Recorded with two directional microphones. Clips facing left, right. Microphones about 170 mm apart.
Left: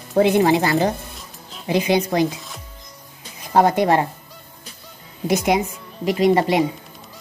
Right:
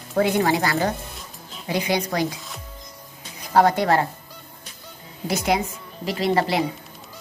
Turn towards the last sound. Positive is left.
turn(degrees=20)  # may be behind; listen again after turning